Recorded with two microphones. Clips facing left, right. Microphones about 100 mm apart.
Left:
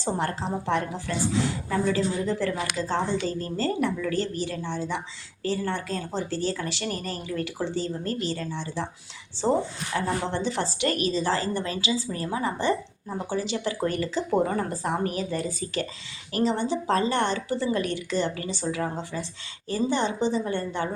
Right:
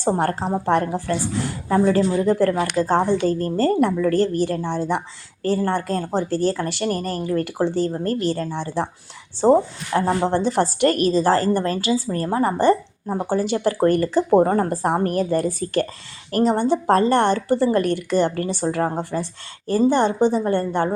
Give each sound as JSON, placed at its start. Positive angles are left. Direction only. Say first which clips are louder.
{"t": 0.0, "sound": "a woman's voice", "louder": "right 7 dB", "side_deg": -50}